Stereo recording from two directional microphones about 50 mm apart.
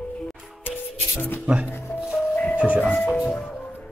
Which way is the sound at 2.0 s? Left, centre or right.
Centre.